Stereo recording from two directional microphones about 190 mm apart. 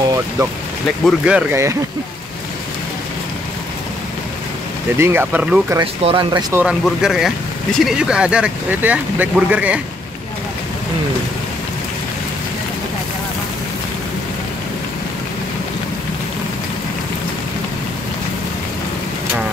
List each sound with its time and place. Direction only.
1.0 s speech: 5° right (ahead or behind)
4.9 s speech: 10° right (ahead or behind)
6.0 s speech: 25° right (ahead or behind)
6.5 s speech: 5° right (ahead or behind)